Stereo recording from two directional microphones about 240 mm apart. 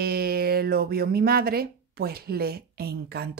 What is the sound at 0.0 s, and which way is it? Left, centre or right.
Speech, right.